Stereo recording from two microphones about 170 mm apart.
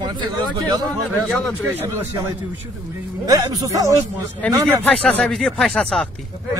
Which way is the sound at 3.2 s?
20° right (ahead or behind).